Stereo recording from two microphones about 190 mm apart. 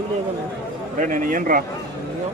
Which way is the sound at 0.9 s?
45° right (ahead or behind).